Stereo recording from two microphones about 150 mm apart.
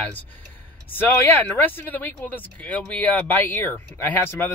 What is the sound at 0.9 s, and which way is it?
Speech, 10° left (ahead or behind).